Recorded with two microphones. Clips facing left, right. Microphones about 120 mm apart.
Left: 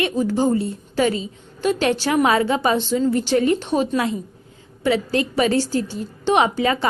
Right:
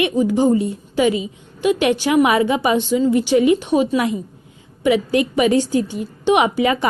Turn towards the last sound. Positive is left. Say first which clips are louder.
# right 2 dB
turn(degrees=-15)  # may be behind; listen again after turning